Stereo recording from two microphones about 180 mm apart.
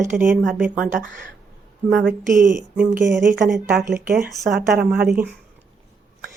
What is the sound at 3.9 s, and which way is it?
Speech, 55° right (ahead or behind).